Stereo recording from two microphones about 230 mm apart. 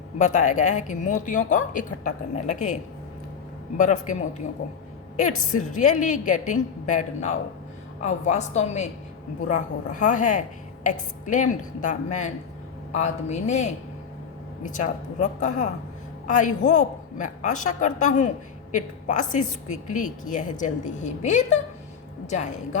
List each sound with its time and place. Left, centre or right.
0.2 s a woman's voice: left
5.5 s a woman's voice: left